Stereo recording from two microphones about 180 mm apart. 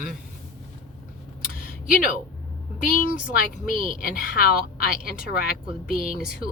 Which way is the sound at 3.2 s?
50° left (ahead or behind).